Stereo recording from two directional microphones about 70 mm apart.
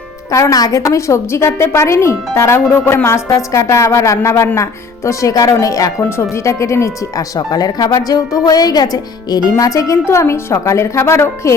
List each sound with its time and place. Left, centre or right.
0.3 s a woman's voice: left
3.2 s a woman's voice: left
6.3 s a woman's voice: left
7.3 s a woman's voice: left
9.5 s a woman's voice: left
10.1 s speech: left